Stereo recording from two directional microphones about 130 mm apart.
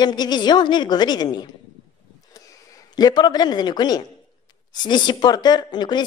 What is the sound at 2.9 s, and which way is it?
A woman's voice, 30° left (ahead or behind).